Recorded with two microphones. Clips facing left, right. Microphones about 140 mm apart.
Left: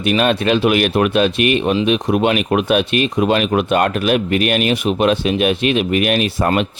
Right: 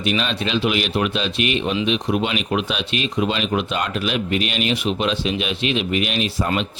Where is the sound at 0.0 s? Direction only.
55° left (ahead or behind).